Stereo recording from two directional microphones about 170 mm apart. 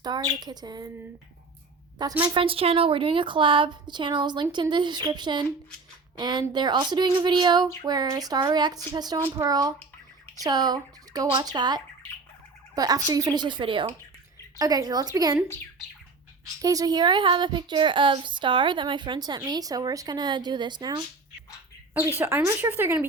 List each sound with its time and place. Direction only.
0.0 s a woman's voice: 25° right (ahead or behind)
2.0 s a woman's voice: 25° right (ahead or behind)
16.6 s a woman's voice: 20° right (ahead or behind)
22.2 s speech: 15° right (ahead or behind)